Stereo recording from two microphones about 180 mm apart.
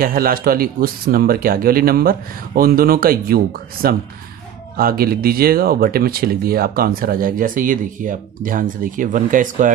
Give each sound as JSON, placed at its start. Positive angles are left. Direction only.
{"t": 0.0, "sound": "speech", "side_deg": -50}
{"t": 4.7, "sound": "speech", "side_deg": -55}